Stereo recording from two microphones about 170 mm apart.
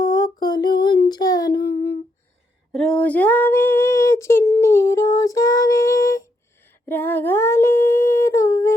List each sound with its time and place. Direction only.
0.0 s a sound: 25° left (ahead or behind)
1.6 s humming: 35° left (ahead or behind)
2.7 s female singing: 5° left (ahead or behind)
6.8 s humming: 10° left (ahead or behind)